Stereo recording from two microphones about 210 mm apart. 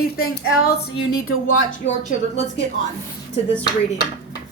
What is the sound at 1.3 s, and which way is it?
Speech, 70° left (ahead or behind).